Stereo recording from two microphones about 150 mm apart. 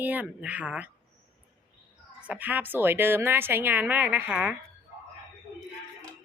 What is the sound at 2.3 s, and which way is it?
A woman's voice, 10° right (ahead or behind).